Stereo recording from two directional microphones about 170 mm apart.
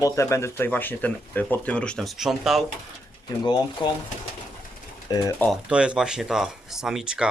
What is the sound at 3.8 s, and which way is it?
Speech, 25° left (ahead or behind).